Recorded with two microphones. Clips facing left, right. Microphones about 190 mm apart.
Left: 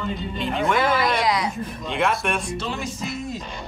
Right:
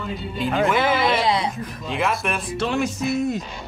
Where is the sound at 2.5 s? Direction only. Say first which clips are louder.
Right 6 dB; 65° right (ahead or behind).